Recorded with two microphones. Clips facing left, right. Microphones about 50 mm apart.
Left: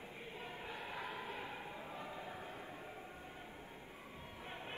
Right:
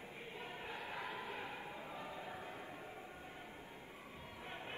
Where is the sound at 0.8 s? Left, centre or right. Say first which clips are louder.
Even; right.